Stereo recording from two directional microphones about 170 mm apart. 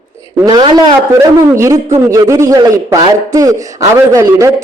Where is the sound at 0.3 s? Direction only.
25° right (ahead or behind).